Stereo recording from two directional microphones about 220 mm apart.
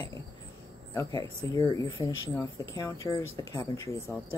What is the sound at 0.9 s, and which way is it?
Speech, 15° left (ahead or behind).